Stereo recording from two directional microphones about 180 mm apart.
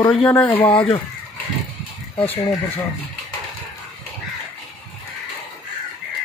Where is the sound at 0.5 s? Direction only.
30° left (ahead or behind).